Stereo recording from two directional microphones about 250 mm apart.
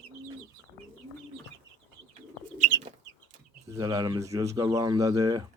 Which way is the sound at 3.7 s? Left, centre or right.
Centre.